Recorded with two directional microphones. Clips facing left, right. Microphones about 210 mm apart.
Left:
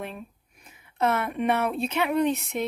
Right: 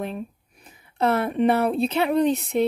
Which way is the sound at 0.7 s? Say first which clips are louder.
Right 3 dB; 35° right (ahead or behind).